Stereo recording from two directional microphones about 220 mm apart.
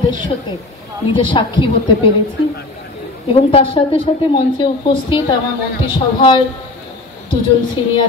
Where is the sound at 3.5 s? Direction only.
25° left (ahead or behind).